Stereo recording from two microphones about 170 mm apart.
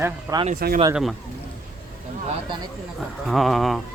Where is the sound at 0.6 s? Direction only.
60° right (ahead or behind).